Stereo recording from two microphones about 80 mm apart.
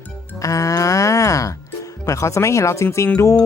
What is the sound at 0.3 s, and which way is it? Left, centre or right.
Speech, left.